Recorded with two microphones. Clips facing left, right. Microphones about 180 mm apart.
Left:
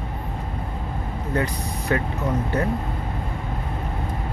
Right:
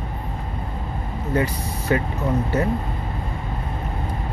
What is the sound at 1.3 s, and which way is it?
Speech, 5° right (ahead or behind).